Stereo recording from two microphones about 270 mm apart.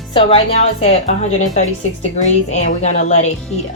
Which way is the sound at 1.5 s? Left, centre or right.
Left.